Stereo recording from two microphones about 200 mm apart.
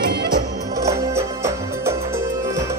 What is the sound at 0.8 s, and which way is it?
Music, 15° right (ahead or behind).